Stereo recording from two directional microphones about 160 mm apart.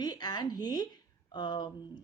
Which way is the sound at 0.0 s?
25° left (ahead or behind).